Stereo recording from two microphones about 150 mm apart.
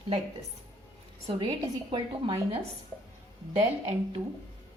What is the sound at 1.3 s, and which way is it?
A woman's voice, 35° right (ahead or behind).